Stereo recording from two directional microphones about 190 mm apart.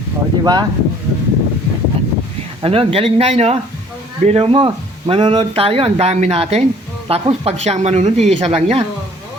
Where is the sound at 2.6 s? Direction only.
30° right (ahead or behind).